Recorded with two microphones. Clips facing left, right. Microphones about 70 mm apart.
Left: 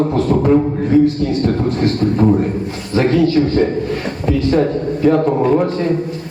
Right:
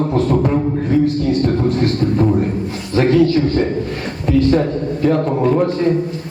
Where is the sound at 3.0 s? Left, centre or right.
Centre.